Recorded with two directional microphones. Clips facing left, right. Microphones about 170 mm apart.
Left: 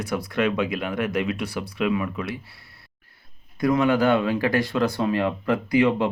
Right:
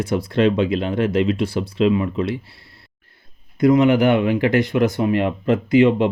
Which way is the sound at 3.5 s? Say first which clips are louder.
Right 6 dB; 20° right (ahead or behind).